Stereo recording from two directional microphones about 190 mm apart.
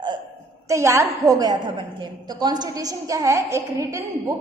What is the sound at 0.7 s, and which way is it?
A woman's voice, 15° right (ahead or behind).